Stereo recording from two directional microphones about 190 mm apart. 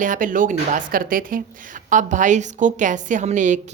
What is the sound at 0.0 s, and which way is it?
Speech, 45° right (ahead or behind).